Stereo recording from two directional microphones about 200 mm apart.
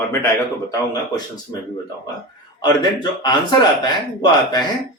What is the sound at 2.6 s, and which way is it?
Speech, 20° left (ahead or behind).